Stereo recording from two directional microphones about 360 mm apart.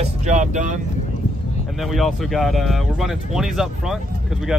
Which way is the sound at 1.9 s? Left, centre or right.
Centre.